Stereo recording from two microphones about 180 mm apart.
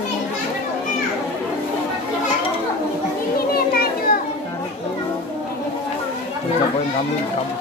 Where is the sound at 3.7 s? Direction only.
55° left (ahead or behind).